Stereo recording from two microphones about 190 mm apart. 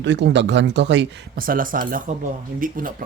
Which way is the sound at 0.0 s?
65° right (ahead or behind).